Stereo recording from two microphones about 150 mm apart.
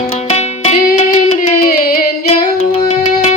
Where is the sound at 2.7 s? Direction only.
45° left (ahead or behind).